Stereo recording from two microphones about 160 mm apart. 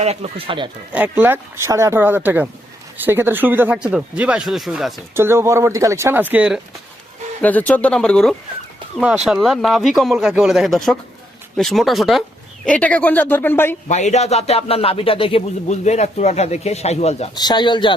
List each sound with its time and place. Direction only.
0.0 s speech: 40° right (ahead or behind)
0.9 s speech: 10° right (ahead or behind)
5.1 s speech: 15° right (ahead or behind)
7.4 s speech: 10° left (ahead or behind)
13.8 s speech: 45° left (ahead or behind)
17.3 s speech: 25° left (ahead or behind)